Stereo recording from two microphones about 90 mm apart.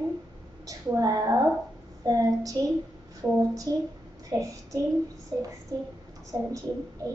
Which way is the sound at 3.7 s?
40° right (ahead or behind).